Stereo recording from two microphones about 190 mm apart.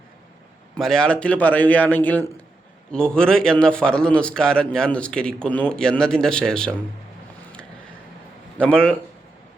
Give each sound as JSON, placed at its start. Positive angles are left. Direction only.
{"t": 0.8, "sound": "a man's voice", "side_deg": 5}
{"t": 8.5, "sound": "a man's voice", "side_deg": 5}